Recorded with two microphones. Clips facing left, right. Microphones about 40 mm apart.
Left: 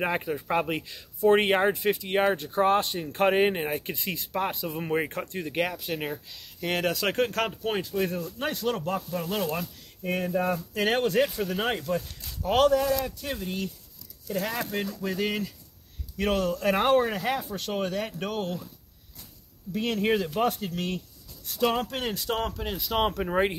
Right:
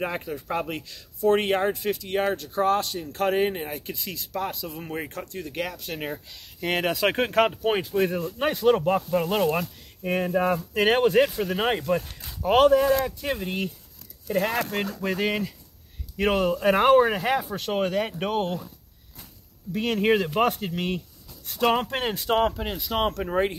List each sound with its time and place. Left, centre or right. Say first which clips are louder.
0.0 s speech: left 2 dB; centre
6.8 s speech: right 2 dB; centre
12.3 s speech: right 4 dB; centre
13.4 s speech: right 3 dB; right
16.2 s speech: right 3 dB; centre
19.7 s speech: right 3 dB; right
22.7 s speech: right 1 dB; centre